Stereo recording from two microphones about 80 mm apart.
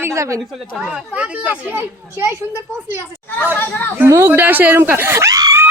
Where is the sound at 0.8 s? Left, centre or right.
Centre.